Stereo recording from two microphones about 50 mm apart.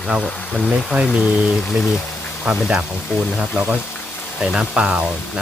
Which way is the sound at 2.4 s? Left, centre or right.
Centre.